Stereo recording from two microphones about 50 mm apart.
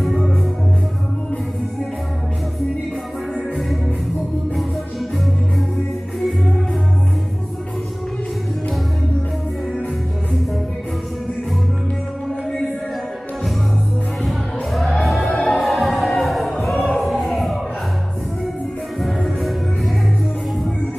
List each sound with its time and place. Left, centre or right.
14.2 s music: centre
15.2 s music: left
15.6 s music: centre
18.9 s music: centre